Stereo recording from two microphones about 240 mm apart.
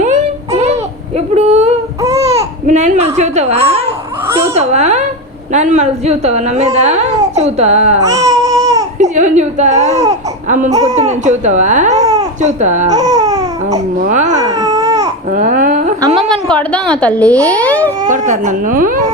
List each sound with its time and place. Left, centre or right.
0.0 s a sound: right
2.1 s speech: right
4.3 s a child's voice: centre
4.5 s a woman's voice: right
8.0 s baby cry: centre
9.0 s a woman's voice: right
11.9 s baby cry: centre
12.4 s a woman's voice: right
12.9 s baby cry: centre
14.0 s speech: right
14.4 s baby cry: centre
15.3 s babbling: right
16.3 s a woman's voice: centre
18.3 s speech: right